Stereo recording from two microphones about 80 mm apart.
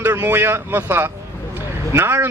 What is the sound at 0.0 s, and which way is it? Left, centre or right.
A man's voice, right.